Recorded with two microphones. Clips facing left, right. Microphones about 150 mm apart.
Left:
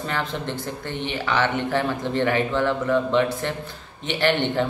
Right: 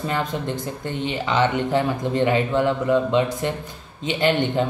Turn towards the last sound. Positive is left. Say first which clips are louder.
# right 1 dB
turn(degrees=-15)  # may be behind; listen again after turning